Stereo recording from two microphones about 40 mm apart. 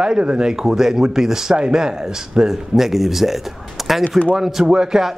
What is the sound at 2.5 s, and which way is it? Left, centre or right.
Speech, centre.